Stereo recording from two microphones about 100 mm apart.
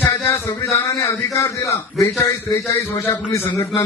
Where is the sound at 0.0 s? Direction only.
25° left (ahead or behind).